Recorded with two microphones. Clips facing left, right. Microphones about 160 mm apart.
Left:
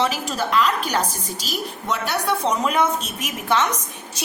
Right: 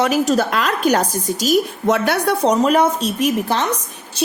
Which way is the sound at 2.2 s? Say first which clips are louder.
Right 5 dB; 35° right (ahead or behind).